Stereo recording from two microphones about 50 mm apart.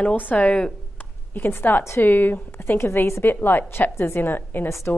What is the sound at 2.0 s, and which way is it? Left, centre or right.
A woman's voice, left.